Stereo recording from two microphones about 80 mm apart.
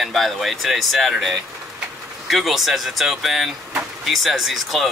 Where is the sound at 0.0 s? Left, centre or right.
Centre.